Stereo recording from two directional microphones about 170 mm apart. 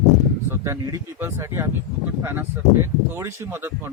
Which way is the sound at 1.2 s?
15° right (ahead or behind).